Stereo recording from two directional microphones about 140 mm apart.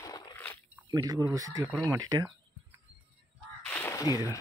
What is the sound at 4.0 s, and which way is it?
Speech, 25° left (ahead or behind).